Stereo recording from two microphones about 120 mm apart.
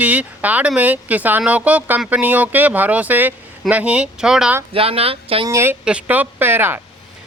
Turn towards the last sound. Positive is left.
turn(degrees=-20)  # may be behind; listen again after turning